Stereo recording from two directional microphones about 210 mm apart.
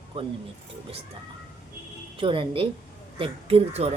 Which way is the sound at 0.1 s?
25° right (ahead or behind).